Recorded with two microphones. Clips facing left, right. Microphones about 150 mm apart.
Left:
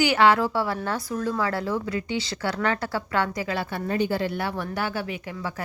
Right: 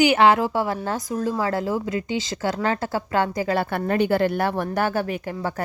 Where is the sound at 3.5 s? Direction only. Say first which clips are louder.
Right 5 dB; 55° right (ahead or behind).